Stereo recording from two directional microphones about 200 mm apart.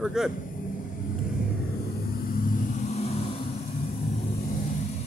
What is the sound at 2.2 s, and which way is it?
Vehicle, 35° left (ahead or behind).